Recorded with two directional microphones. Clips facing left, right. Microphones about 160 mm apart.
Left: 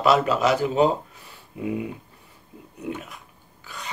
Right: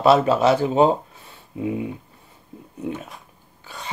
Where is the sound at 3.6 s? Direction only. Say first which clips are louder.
Right 2 dB; 25° right (ahead or behind).